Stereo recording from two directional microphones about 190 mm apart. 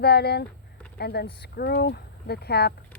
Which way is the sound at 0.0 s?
60° left (ahead or behind).